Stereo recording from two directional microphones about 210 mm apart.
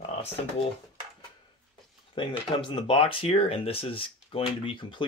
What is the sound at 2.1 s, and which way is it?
Speech, 25° left (ahead or behind).